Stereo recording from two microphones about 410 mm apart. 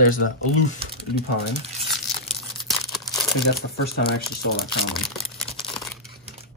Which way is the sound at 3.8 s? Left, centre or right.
Left.